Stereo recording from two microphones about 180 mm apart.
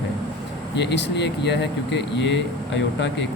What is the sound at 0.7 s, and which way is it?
Speech, 70° left (ahead or behind).